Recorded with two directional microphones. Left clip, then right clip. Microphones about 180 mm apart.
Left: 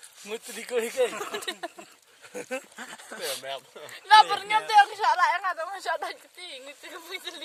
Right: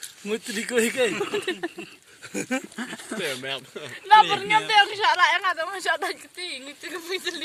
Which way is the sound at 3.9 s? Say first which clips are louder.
Right 1 dB; 80° left.